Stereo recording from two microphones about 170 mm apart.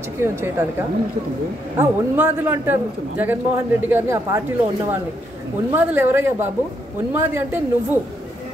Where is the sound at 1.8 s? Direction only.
15° right (ahead or behind).